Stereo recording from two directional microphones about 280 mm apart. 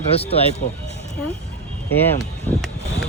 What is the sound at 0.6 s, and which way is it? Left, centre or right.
Speech, left.